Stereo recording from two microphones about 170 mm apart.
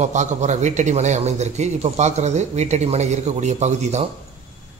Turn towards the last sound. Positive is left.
turn(degrees=-40)  # may be behind; listen again after turning